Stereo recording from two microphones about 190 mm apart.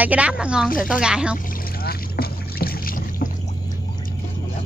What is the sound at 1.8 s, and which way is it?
Boat, 55° left (ahead or behind).